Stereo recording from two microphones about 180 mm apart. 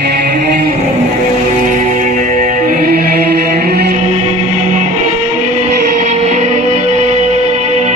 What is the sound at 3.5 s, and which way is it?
Music, 65° right (ahead or behind).